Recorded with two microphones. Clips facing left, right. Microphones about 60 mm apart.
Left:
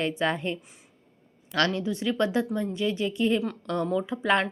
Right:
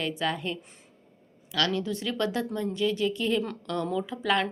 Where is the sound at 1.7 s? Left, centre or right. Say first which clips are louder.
Left 2 dB; left.